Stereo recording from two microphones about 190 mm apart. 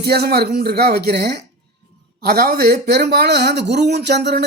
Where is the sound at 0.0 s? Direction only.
55° right (ahead or behind).